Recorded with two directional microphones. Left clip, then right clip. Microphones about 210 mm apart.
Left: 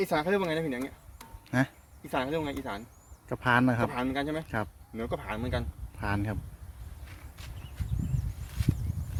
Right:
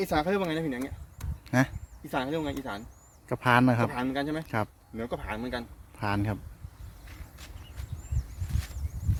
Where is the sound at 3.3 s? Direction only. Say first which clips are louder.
Right 2 dB; 15° right (ahead or behind).